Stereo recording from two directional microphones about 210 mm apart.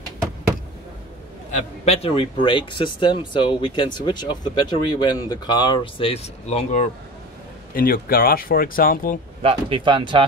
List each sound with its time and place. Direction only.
1.5 s speech: 30° left (ahead or behind)
7.7 s speech: 45° left (ahead or behind)
9.4 s speech: 25° right (ahead or behind)